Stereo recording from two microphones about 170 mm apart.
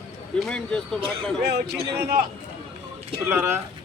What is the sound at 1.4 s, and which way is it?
Speech, 75° right (ahead or behind).